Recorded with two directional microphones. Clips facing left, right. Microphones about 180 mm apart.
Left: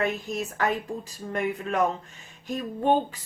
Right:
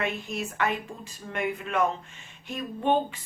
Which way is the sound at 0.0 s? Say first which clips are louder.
Left 3 dB; 40° left (ahead or behind).